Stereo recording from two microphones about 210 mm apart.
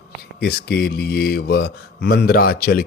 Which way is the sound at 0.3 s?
50° left (ahead or behind).